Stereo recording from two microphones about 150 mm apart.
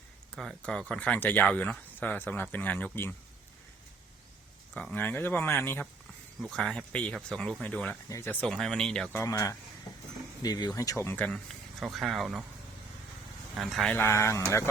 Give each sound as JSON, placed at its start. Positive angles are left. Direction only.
{"t": 0.3, "sound": "speech", "side_deg": 5}
{"t": 4.7, "sound": "speech", "side_deg": 5}
{"t": 6.5, "sound": "speech", "side_deg": 5}
{"t": 9.1, "sound": "speech", "side_deg": 20}
{"t": 13.6, "sound": "speech", "side_deg": 0}
{"t": 13.9, "sound": "speech", "side_deg": 15}